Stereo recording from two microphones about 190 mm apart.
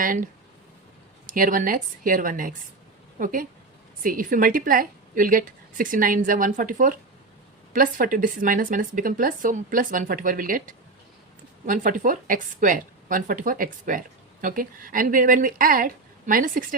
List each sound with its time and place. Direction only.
0.0 s speech: 45° right (ahead or behind)
1.3 s speech: 45° right (ahead or behind)